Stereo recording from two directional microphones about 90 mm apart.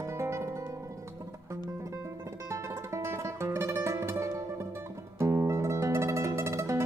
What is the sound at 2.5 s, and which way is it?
Music, 30° right (ahead or behind).